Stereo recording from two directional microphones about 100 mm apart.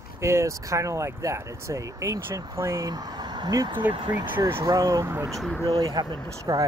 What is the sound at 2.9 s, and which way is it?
Speech, 40° right (ahead or behind).